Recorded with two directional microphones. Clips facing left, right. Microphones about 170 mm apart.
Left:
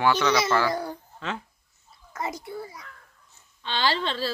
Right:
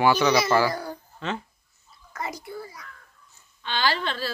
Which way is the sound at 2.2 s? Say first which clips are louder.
Left 1 dB; 25° left (ahead or behind).